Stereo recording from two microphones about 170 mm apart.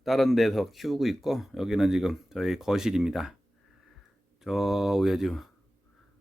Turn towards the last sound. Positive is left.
turn(degrees=0)  # may be behind; listen again after turning